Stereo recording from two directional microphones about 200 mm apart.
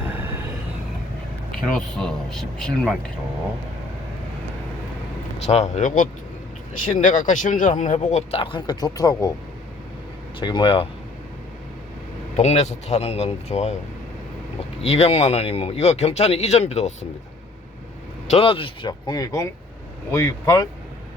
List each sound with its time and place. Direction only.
0.1 s vehicle: 10° right (ahead or behind)
1.9 s speech: 5° left (ahead or behind)
5.4 s speech: 35° left (ahead or behind)
10.4 s speech: 25° left (ahead or behind)
12.4 s speech: 35° left (ahead or behind)
14.8 s speech: 30° left (ahead or behind)
18.3 s speech: 25° left (ahead or behind)